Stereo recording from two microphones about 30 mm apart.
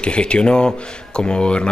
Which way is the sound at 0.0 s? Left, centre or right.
Left.